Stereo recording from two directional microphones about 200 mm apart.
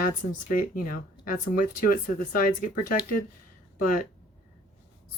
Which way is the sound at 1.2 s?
40° left (ahead or behind).